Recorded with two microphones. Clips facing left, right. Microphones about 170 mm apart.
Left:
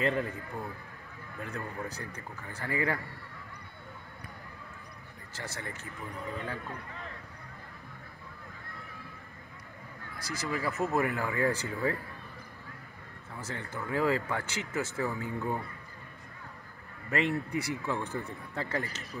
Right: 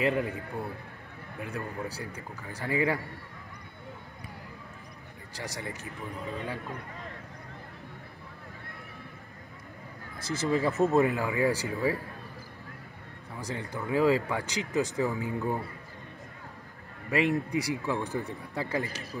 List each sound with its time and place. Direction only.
0.0 s speech: 15° right (ahead or behind)
1.4 s speech: 10° right (ahead or behind)
5.3 s speech: 15° right (ahead or behind)
10.1 s speech: 25° right (ahead or behind)
10.9 s speech: 20° right (ahead or behind)
13.4 s speech: 15° right (ahead or behind)
17.1 s speech: 15° right (ahead or behind)